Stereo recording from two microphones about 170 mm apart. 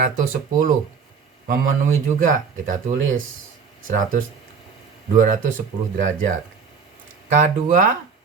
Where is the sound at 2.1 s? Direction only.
50° right (ahead or behind).